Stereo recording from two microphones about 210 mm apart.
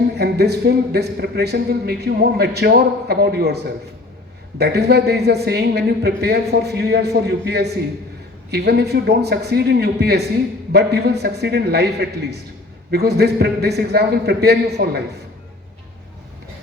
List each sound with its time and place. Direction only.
0.2 s speech: 50° right (ahead or behind)